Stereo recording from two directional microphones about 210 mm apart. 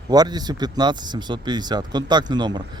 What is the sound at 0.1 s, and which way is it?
Speech, 20° right (ahead or behind).